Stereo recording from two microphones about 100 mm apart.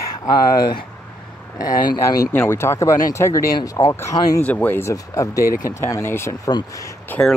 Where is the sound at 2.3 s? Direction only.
25° left (ahead or behind).